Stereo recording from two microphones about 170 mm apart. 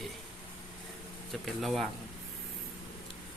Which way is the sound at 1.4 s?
Centre (ahead or behind).